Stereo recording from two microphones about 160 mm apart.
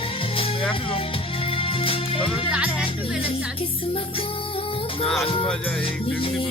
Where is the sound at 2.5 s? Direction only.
10° right (ahead or behind).